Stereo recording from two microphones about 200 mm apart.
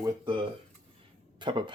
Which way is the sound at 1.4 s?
25° right (ahead or behind).